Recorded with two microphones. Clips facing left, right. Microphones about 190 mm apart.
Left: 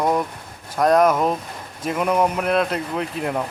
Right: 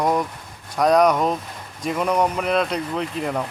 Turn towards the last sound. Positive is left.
turn(degrees=0)  # may be behind; listen again after turning